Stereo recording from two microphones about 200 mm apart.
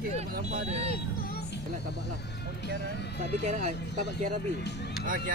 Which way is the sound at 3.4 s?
35° right (ahead or behind).